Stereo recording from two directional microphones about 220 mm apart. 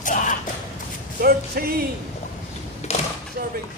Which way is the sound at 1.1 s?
45° right (ahead or behind).